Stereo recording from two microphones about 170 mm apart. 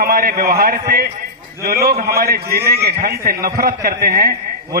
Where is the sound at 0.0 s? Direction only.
60° right (ahead or behind).